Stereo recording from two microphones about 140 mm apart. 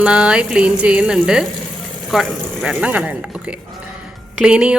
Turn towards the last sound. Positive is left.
turn(degrees=-5)  # may be behind; listen again after turning